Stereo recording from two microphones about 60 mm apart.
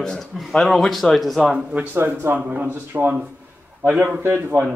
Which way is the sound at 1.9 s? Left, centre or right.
Right.